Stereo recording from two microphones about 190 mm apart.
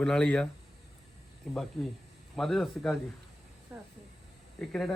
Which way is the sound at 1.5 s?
Centre (ahead or behind).